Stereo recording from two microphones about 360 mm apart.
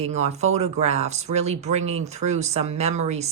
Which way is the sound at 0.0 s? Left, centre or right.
Centre.